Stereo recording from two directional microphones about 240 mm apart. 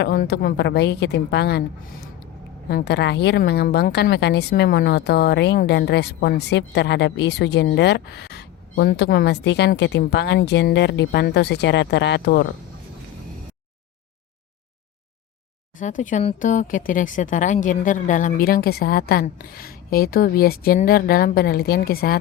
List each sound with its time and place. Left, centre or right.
0.0 s speech: left
15.8 s speech: left